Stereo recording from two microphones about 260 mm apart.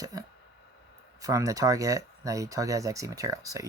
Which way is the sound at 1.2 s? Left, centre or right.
Centre.